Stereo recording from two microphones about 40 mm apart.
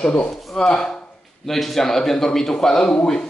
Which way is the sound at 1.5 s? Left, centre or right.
Centre.